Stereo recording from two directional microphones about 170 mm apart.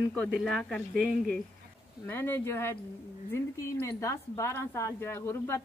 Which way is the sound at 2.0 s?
15° left (ahead or behind).